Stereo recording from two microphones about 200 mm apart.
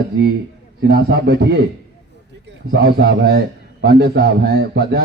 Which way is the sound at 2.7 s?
55° right (ahead or behind).